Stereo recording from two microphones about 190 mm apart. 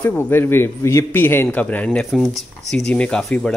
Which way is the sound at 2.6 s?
35° right (ahead or behind).